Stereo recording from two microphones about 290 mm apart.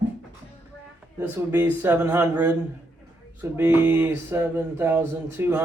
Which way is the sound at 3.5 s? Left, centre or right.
Centre.